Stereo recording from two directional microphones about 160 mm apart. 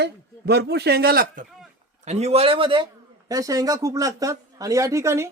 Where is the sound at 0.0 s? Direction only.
90° right; by 1.5 s 70° right (ahead or behind).